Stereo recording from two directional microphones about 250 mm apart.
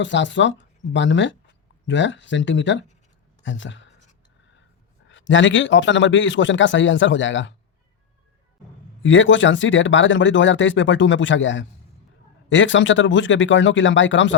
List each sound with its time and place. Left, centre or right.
0.0 s speech: left
5.0 s speech: left
9.0 s speech: left